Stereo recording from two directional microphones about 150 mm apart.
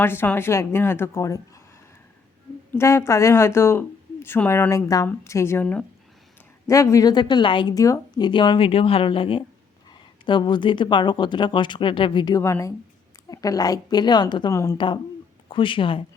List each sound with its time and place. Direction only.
0.0 s speech: 15° left (ahead or behind)
2.7 s speech: 15° left (ahead or behind)
12.4 s a woman's voice: 20° left (ahead or behind)
14.5 s a woman's voice: 20° left (ahead or behind)
15.4 s speech: 35° left (ahead or behind)